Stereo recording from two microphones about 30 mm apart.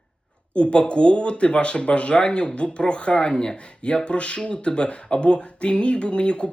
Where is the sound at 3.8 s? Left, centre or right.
Left.